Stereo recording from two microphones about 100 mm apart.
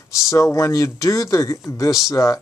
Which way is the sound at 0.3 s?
30° left (ahead or behind).